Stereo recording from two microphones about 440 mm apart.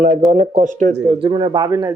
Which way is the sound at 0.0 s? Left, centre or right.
Centre.